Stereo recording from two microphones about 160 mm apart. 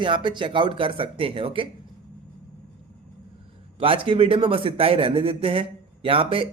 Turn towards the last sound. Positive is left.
turn(degrees=-35)  # may be behind; listen again after turning